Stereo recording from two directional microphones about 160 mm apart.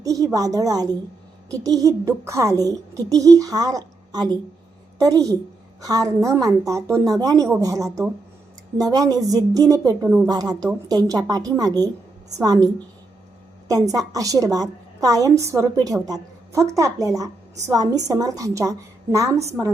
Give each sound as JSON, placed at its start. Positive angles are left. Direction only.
{"t": 0.0, "sound": "a sound", "side_deg": -20}
{"t": 0.3, "sound": "a woman's voice", "side_deg": -20}
{"t": 6.8, "sound": "speech", "side_deg": 0}
{"t": 7.1, "sound": "a woman's voice", "side_deg": -25}
{"t": 13.9, "sound": "a woman's voice", "side_deg": -20}